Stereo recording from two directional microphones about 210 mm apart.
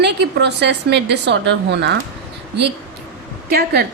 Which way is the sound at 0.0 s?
55° right (ahead or behind).